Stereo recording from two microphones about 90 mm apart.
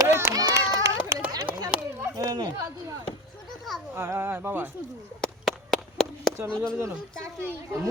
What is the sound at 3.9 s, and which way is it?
Speech, 25° right (ahead or behind).